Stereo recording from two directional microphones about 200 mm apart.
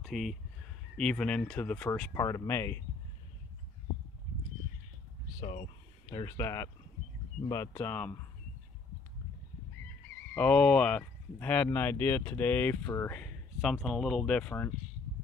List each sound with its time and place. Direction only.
0.0 s speech: centre (ahead or behind)
5.4 s speech: 35° left (ahead or behind)
6.1 s speech: 15° left (ahead or behind)
10.3 s speech: 5° left (ahead or behind)